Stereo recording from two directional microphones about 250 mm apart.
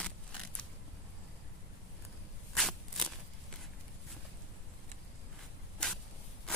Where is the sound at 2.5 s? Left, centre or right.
Centre.